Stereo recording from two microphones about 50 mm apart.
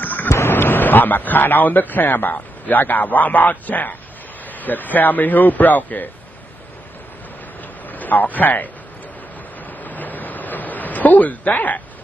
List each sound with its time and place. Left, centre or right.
0.0 s waves: left
0.3 s speech: left
7.9 s a man's voice: left
9.8 s a sound: left